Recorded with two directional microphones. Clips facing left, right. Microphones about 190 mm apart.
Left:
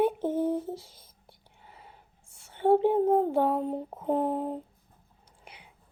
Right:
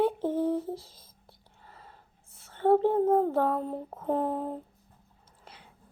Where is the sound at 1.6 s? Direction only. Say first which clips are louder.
Even; 20° left (ahead or behind).